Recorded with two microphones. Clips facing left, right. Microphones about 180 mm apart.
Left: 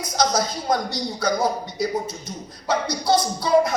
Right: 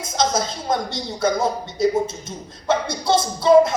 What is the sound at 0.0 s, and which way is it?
Speech, 25° right (ahead or behind).